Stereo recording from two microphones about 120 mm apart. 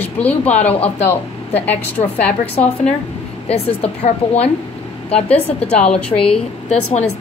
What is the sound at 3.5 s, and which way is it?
A woman's voice, 60° left (ahead or behind).